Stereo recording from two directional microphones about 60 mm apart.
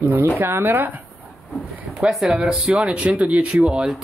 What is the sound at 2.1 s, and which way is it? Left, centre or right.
Speech, centre.